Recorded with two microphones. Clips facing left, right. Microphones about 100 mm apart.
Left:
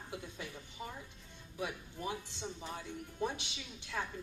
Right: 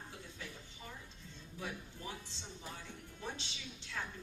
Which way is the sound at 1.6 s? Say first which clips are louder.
Left 5 dB; 20° left (ahead or behind).